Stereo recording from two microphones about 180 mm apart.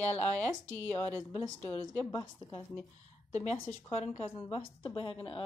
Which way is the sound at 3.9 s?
35° left (ahead or behind).